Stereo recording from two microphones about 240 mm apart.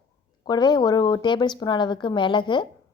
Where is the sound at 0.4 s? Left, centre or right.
Centre.